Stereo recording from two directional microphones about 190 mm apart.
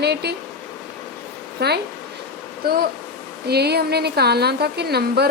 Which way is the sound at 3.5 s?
60° right (ahead or behind).